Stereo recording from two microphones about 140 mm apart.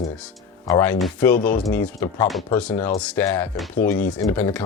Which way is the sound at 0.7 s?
15° left (ahead or behind).